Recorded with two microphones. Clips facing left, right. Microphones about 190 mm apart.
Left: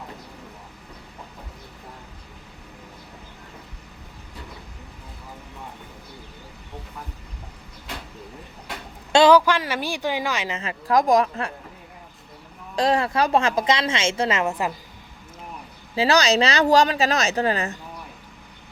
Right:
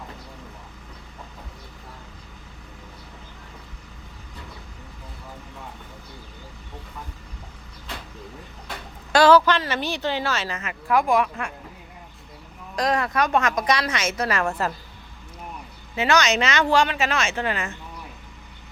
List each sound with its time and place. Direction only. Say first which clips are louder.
9.1 s speech: left 1 dB; 15° left (ahead or behind)
10.6 s speech: left 3 dB; 35° left (ahead or behind)
12.7 s a woman's voice: left 2 dB; 30° left (ahead or behind)
16.0 s speech: left 2 dB; 35° left (ahead or behind)